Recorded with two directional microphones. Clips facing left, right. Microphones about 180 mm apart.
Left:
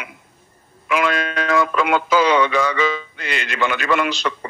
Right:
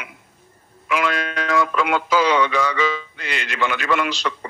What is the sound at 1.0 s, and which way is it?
Speech, 55° left (ahead or behind).